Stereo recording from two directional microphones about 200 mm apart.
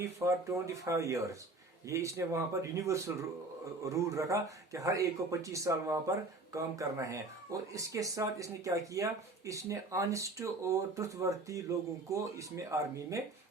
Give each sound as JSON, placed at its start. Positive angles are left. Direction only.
{"t": 0.0, "sound": "speech", "side_deg": -15}